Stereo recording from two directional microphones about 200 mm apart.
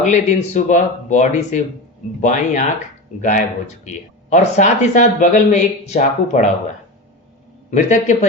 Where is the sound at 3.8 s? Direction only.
35° left (ahead or behind).